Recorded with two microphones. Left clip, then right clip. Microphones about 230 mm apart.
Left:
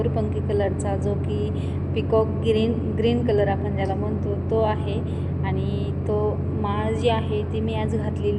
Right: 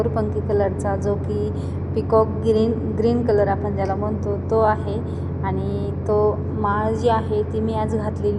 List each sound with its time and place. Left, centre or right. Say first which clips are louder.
0.2 s a woman's voice: right 4 dB; right
4.5 s a woman's voice: right 4 dB; right
6.1 s a woman's voice: right 6 dB; right